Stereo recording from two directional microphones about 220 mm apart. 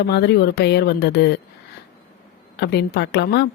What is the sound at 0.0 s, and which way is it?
Speech, 50° left (ahead or behind).